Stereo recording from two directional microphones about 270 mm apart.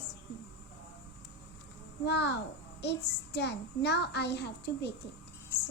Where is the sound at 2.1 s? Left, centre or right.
Left.